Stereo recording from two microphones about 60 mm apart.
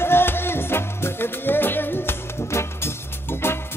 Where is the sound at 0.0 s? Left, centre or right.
Left.